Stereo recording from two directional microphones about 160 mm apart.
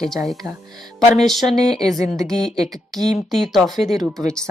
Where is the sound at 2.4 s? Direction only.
45° left (ahead or behind).